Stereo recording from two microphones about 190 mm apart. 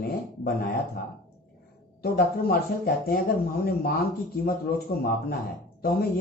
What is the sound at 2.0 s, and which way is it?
Speech, 55° left (ahead or behind).